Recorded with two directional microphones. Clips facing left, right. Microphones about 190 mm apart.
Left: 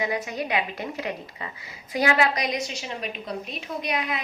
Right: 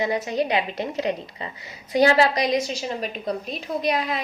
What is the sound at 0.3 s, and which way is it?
A woman's voice, 25° right (ahead or behind).